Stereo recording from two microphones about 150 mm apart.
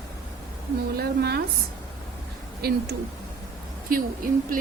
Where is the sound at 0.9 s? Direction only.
90° right.